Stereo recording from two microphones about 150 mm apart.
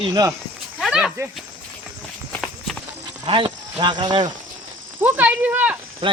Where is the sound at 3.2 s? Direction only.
35° right (ahead or behind).